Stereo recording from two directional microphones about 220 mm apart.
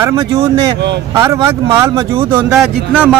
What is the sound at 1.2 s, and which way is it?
Speech, 10° right (ahead or behind).